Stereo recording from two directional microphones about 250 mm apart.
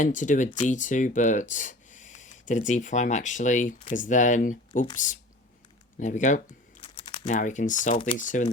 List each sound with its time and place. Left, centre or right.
0.0 s speech: left
6.0 s speech: left